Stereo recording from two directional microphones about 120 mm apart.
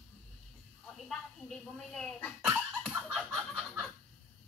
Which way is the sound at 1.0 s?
5° left (ahead or behind).